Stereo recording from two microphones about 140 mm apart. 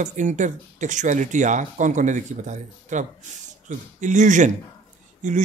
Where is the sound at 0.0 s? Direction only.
60° right (ahead or behind).